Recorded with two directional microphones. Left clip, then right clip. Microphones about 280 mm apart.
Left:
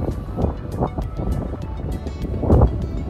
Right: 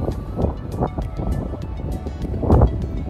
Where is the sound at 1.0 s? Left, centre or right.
Centre.